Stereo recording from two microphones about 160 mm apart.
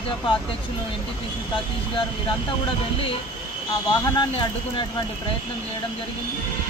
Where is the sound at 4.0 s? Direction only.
30° left (ahead or behind).